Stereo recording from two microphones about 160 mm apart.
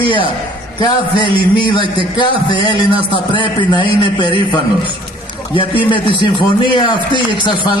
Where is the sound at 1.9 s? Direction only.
30° left (ahead or behind).